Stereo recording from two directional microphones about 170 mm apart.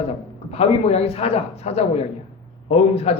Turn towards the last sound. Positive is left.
turn(degrees=35)  # may be behind; listen again after turning